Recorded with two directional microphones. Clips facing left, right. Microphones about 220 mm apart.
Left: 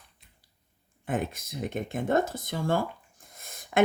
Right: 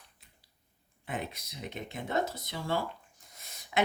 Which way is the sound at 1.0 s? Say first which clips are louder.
Left 7 dB; 50° left (ahead or behind).